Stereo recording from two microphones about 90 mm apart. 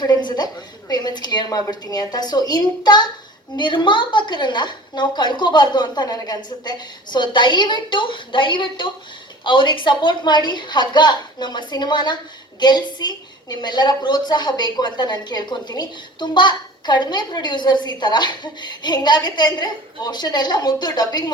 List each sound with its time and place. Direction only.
0.0 s a woman's voice: 55° left (ahead or behind)